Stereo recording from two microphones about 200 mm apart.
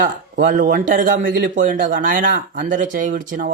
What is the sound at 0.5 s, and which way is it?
Speech, 45° right (ahead or behind).